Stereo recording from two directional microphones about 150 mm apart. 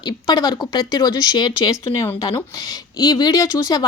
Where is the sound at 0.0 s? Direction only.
30° left (ahead or behind).